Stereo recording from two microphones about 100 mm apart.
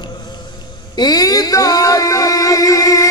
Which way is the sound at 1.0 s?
40° left (ahead or behind).